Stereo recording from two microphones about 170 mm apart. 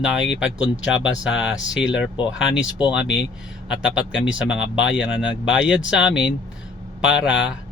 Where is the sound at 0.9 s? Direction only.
90° left.